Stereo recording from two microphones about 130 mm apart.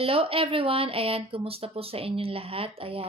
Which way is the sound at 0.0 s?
45° right (ahead or behind).